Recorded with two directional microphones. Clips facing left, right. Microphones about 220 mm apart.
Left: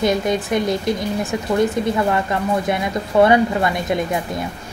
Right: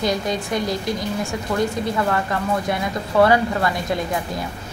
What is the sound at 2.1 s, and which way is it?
A woman's voice, 20° left (ahead or behind).